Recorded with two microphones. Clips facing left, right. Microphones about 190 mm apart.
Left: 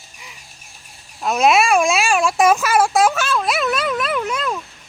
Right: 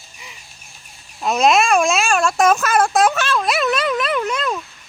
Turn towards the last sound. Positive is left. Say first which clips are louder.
# right 1 dB
turn(degrees=5)  # may be behind; listen again after turning